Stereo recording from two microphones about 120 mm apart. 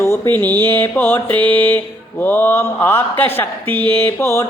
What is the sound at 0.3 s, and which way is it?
Mantra, 15° left (ahead or behind).